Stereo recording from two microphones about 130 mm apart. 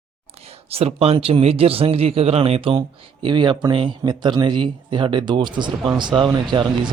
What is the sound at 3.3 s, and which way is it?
Speech, 35° right (ahead or behind).